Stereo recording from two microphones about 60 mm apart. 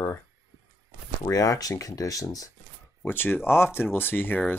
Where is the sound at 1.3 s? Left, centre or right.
Left.